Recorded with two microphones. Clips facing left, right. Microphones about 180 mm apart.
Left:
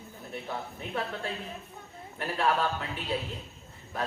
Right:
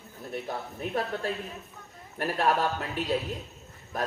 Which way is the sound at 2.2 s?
40° right (ahead or behind).